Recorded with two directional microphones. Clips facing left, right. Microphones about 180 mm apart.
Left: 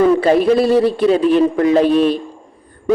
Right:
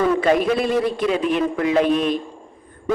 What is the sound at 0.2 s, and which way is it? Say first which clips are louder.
A woman's voice: left 5 dB; 35° left (ahead or behind).